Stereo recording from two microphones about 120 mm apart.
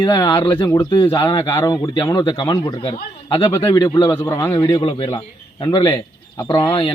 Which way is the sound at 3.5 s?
30° left (ahead or behind).